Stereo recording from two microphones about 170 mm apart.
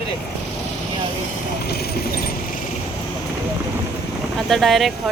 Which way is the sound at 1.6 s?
70° left (ahead or behind).